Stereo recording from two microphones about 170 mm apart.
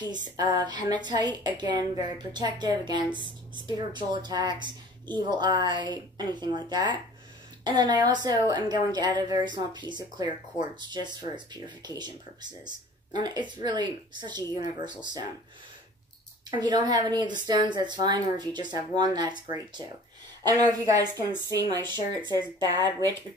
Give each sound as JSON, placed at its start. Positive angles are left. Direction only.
{"t": 0.1, "sound": "a woman's voice", "side_deg": -25}
{"t": 16.4, "sound": "a woman's voice", "side_deg": -25}